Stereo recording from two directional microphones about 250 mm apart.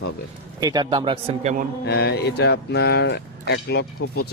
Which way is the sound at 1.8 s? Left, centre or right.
Left.